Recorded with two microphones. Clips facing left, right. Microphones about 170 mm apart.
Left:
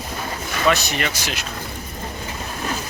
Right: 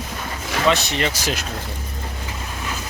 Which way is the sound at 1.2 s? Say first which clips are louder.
Right 4 dB; 40° right (ahead or behind).